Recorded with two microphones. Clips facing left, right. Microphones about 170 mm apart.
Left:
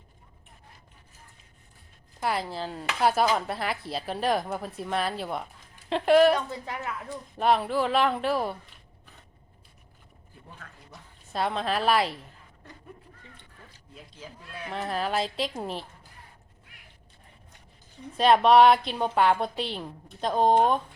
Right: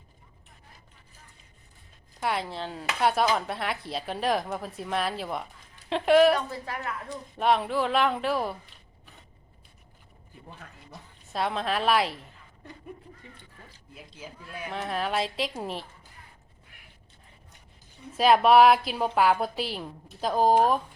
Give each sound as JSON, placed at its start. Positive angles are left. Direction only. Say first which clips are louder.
{"t": 2.2, "sound": "speech", "louder": "left 1 dB", "side_deg": 0}
{"t": 6.5, "sound": "a woman's voice", "louder": "even", "side_deg": 20}
{"t": 7.3, "sound": "speech", "louder": "left 1 dB", "side_deg": 0}
{"t": 10.6, "sound": "speech", "louder": "right 1 dB", "side_deg": -20}
{"t": 11.3, "sound": "speech", "louder": "left 1 dB", "side_deg": 0}
{"t": 13.9, "sound": "speech", "louder": "right 1 dB", "side_deg": -10}
{"t": 18.2, "sound": "speech", "louder": "even", "side_deg": -5}